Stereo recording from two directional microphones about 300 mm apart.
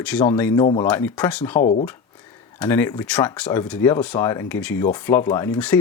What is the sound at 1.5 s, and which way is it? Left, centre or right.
Speech, left.